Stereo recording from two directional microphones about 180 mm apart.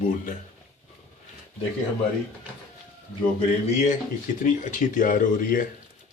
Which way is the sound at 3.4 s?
40° left (ahead or behind).